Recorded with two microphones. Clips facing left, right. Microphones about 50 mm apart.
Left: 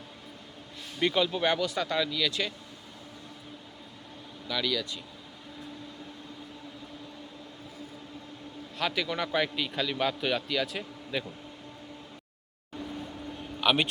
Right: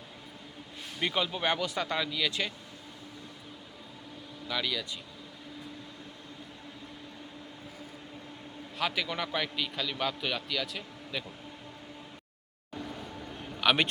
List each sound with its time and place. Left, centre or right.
0.9 s speech: centre
4.4 s speech: centre
8.8 s a man's voice: centre
13.6 s speech: right